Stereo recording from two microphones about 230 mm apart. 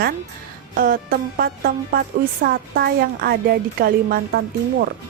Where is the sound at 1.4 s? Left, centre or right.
Right.